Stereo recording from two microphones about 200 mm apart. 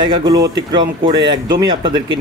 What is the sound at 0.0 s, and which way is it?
Speech, 20° right (ahead or behind).